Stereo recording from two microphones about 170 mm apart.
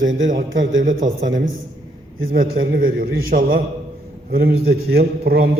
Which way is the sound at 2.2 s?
60° right (ahead or behind).